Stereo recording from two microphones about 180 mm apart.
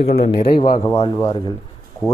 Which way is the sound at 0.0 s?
35° left (ahead or behind).